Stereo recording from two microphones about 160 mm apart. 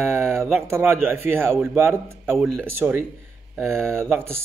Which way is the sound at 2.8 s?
15° right (ahead or behind).